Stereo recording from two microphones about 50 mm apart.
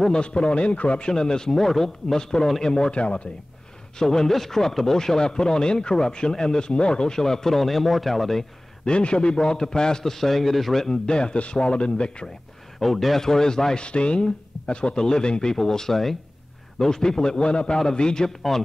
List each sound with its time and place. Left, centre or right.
0.1 s speech: centre
4.0 s speech: centre
8.8 s a man's voice: left
12.7 s speech: centre